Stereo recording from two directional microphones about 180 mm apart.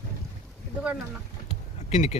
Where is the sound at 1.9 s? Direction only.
40° left (ahead or behind).